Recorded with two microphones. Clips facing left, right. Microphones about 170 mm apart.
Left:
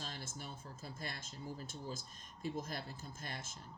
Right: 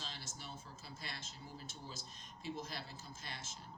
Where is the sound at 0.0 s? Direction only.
50° left (ahead or behind).